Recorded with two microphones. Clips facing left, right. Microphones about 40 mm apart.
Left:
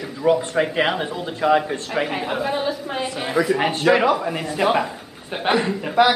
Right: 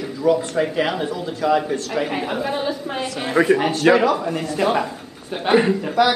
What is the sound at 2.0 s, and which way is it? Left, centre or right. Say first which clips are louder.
A woman's voice: even; centre.